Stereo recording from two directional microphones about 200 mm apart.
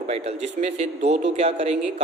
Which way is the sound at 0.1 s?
35° right (ahead or behind).